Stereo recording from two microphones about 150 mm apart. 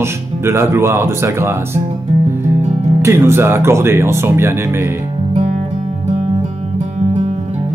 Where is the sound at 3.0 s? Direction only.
15° right (ahead or behind).